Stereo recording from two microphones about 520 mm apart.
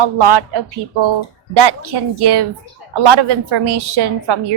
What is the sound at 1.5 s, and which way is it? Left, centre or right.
Speech, right.